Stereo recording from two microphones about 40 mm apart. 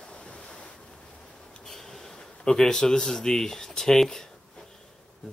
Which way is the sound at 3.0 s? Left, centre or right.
Centre.